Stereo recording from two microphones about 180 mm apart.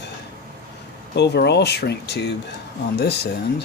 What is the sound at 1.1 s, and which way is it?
Speech, 70° left (ahead or behind).